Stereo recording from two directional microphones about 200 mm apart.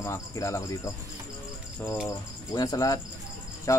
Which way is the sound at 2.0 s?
15° left (ahead or behind).